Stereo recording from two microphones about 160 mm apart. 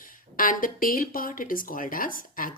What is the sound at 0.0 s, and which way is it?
A woman's voice, 60° left (ahead or behind).